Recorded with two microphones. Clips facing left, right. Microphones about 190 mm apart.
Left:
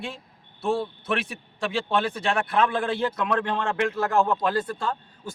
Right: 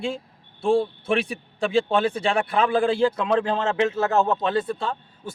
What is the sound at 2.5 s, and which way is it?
Speech, 30° right (ahead or behind).